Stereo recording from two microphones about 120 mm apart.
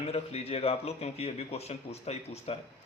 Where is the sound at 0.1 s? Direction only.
60° left (ahead or behind).